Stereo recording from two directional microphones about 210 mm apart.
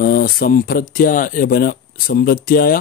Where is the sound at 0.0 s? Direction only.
45° left (ahead or behind).